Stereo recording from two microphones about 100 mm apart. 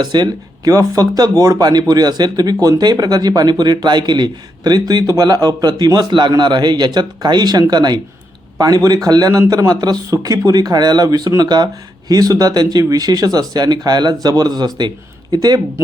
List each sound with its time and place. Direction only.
0.0 s speech: 45° right (ahead or behind)